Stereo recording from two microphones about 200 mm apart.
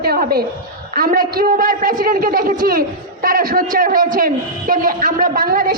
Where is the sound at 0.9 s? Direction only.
45° right (ahead or behind).